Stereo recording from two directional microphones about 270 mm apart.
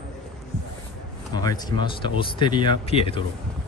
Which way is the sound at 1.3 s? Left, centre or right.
Centre.